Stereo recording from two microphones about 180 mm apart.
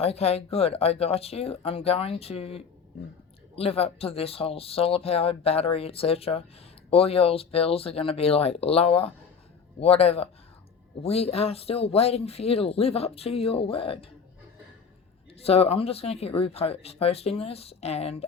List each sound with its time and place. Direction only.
0.0 s speech: 35° left (ahead or behind)
15.4 s speech: 35° left (ahead or behind)